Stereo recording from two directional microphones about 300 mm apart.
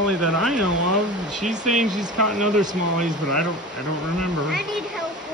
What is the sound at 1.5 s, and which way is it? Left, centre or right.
Speech, right.